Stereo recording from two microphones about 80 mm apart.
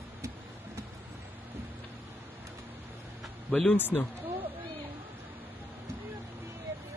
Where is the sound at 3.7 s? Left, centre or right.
Left.